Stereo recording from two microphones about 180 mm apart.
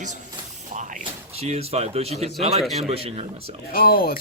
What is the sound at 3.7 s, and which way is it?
Speech, 55° left (ahead or behind).